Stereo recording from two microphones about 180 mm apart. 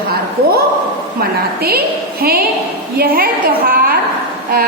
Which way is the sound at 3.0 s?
55° right (ahead or behind).